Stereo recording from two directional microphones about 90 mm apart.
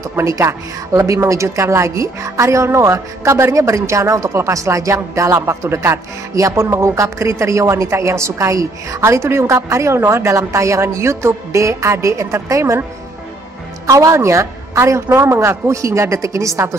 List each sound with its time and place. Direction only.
0.1 s a woman's voice: 35° right (ahead or behind)
13.8 s a woman's voice: 35° right (ahead or behind)